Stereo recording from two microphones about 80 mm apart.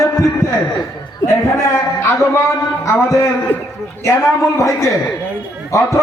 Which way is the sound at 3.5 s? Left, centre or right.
Centre.